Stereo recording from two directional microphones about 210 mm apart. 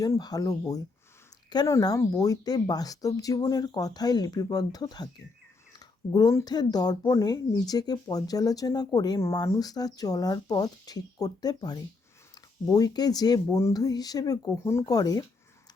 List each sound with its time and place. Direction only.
0.0 s speech: 15° left (ahead or behind)
6.1 s speech: 20° left (ahead or behind)